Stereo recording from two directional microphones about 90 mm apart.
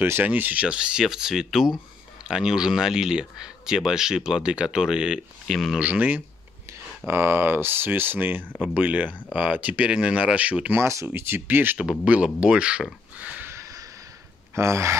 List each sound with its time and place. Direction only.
0.0 s speech: 20° right (ahead or behind); by 5.8 s 5° right (ahead or behind)
5.8 s speech: 15° right (ahead or behind)
10.8 s speech: 35° right (ahead or behind)
11.8 s speech: 10° right (ahead or behind)
13.5 s a sound: 35° right (ahead or behind)
14.5 s speech: 30° right (ahead or behind)